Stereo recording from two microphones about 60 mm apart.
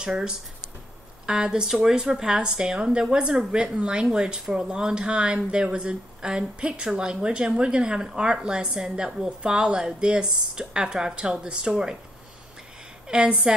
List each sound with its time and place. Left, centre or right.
0.0 s a woman's voice: centre
13.1 s a woman's voice: centre